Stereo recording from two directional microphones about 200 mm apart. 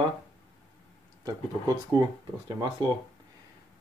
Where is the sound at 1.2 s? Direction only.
20° right (ahead or behind).